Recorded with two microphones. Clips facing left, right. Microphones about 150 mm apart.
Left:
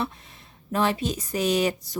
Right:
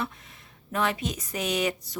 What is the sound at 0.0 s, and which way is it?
Speech, 30° left (ahead or behind).